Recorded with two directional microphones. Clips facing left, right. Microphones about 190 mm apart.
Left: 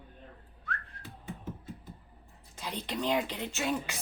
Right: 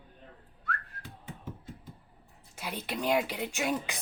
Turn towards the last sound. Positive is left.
turn(degrees=-15)  # may be behind; listen again after turning